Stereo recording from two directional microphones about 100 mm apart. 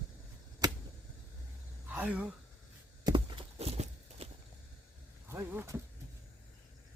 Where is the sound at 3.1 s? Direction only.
55° right (ahead or behind); by 4.3 s 90° right.